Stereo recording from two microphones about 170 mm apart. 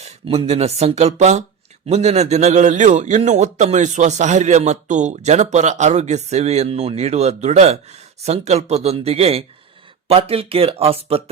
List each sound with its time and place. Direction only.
0.0 s a man's voice: 40° right (ahead or behind)